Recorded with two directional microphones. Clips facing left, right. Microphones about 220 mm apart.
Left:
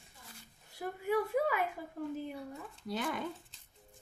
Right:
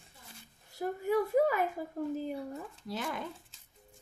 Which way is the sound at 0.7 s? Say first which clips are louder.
Right 3 dB; 40° right (ahead or behind).